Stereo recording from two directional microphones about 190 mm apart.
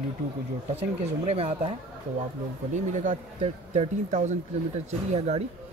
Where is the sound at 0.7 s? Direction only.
35° right (ahead or behind).